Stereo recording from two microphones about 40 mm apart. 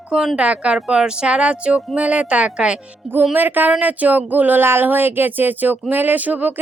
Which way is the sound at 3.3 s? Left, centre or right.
Right.